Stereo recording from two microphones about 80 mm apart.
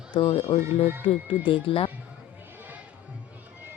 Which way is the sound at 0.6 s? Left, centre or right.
Right.